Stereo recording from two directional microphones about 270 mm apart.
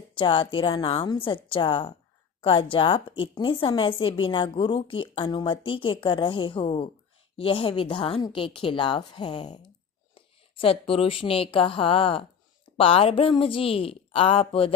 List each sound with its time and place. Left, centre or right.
0.1 s a woman's voice: centre
10.6 s a woman's voice: centre